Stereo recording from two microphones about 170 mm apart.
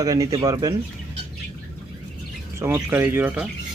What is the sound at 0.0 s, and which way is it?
Speech, 20° right (ahead or behind).